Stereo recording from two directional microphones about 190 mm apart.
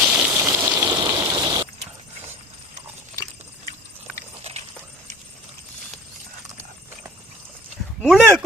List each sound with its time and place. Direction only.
0.0 s water: 5° right (ahead or behind)
0.9 s rain: 20° right (ahead or behind)
8.0 s a sound: centre (ahead or behind)